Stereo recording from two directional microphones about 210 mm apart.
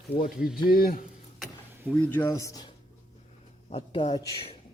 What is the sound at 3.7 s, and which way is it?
Speech, 30° left (ahead or behind).